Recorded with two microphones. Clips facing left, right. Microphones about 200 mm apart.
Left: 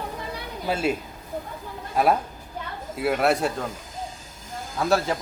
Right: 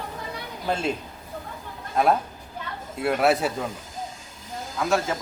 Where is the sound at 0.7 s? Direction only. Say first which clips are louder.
Left 2 dB; 5° left (ahead or behind).